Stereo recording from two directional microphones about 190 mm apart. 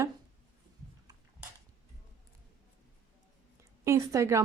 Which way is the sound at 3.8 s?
15° right (ahead or behind).